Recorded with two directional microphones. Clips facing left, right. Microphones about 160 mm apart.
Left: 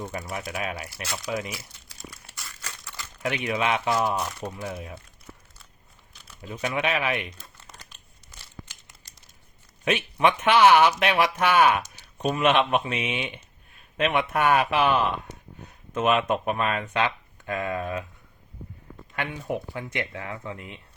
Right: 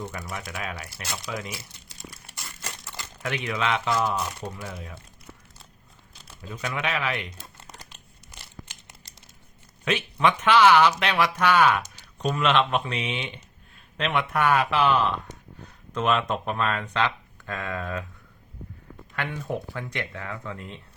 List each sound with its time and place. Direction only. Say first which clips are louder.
0.0 s speech: left 2 dB; 25° left (ahead or behind)
1.5 s crumpling: even; 20° right (ahead or behind)
3.2 s speech: left 2 dB; 20° left (ahead or behind)
6.5 s speech: left 3 dB; 25° left (ahead or behind)
9.8 s speech: left 1 dB; 20° left (ahead or behind)
19.1 s speech: left 1 dB; 15° left (ahead or behind)